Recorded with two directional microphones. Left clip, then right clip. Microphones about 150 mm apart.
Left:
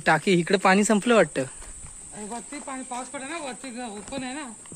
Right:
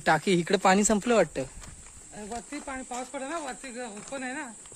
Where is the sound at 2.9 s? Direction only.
80° right.